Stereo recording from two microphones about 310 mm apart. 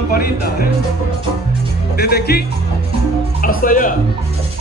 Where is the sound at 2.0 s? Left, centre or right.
Left.